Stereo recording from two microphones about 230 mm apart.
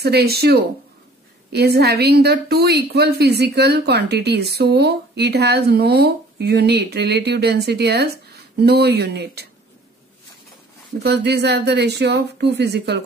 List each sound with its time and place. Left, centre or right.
0.0 s speech: right
11.0 s speech: right